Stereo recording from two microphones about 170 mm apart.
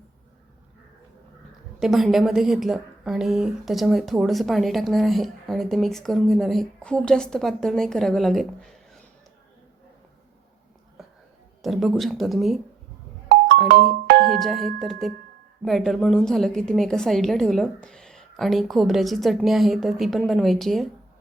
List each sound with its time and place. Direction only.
1.8 s a woman's voice: centre (ahead or behind)
11.6 s a woman's voice: centre (ahead or behind)
13.7 s music: 60° right (ahead or behind)
14.3 s a woman's voice: centre (ahead or behind)